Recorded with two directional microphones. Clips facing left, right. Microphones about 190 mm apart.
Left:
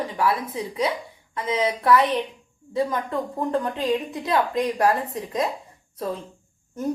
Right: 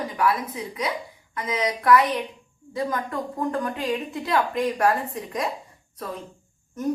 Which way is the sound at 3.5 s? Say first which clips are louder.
Left 3 dB; 20° left (ahead or behind).